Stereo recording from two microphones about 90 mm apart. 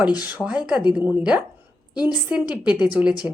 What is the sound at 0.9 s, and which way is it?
A woman's voice, 15° right (ahead or behind).